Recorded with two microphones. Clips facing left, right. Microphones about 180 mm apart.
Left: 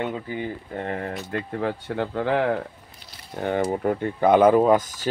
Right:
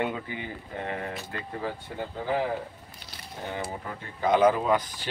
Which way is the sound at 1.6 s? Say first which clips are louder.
Left 7 dB; 75° left (ahead or behind).